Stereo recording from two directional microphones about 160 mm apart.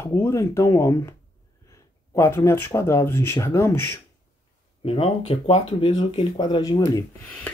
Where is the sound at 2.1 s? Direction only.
15° left (ahead or behind).